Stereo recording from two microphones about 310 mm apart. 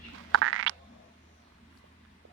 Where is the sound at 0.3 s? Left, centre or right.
Right.